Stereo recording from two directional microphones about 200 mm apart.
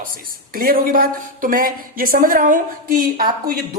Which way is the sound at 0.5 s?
45° right (ahead or behind).